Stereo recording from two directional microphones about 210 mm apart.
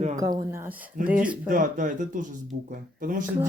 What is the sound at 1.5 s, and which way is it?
Speech, 40° right (ahead or behind).